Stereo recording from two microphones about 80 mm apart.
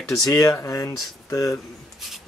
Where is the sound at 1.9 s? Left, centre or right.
Centre.